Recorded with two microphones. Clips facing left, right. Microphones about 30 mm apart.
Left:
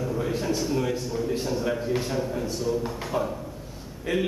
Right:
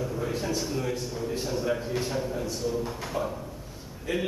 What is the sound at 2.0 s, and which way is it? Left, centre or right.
A man's voice, centre.